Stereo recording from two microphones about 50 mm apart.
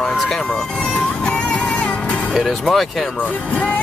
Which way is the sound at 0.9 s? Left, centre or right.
Centre.